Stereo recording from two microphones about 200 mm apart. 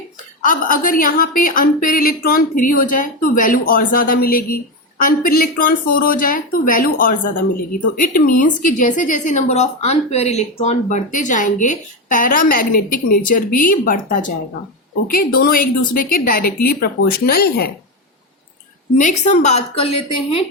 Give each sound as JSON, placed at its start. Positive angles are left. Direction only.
{"t": 0.4, "sound": "a woman's voice", "side_deg": 45}
{"t": 18.9, "sound": "a woman's voice", "side_deg": 35}